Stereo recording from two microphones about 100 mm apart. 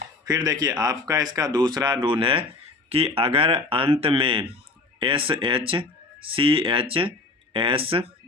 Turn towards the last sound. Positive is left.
turn(degrees=-70)  # may be behind; listen again after turning